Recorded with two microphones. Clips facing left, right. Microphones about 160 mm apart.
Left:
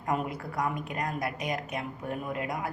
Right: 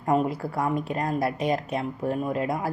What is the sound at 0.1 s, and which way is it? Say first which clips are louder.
A woman's voice: right 7 dB; 30° right (ahead or behind).